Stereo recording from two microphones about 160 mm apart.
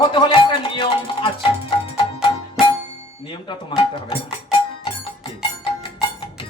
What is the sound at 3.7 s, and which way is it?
Speech, 35° left (ahead or behind).